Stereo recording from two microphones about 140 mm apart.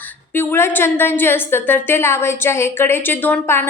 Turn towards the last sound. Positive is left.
turn(degrees=15)  # may be behind; listen again after turning